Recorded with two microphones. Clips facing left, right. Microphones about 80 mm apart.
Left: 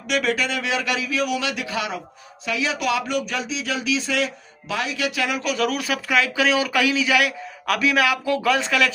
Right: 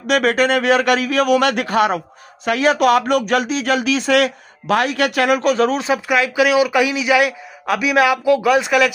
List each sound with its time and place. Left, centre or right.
0.0 s a man's voice: right
5.7 s speech: right